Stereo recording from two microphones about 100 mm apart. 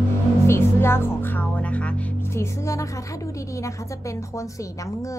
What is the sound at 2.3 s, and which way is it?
A woman's voice, 30° left (ahead or behind).